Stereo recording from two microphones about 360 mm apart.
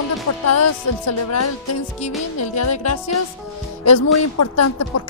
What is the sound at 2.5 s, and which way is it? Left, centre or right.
Speech, left.